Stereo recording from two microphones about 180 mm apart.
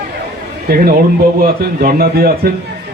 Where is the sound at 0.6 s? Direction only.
55° right (ahead or behind).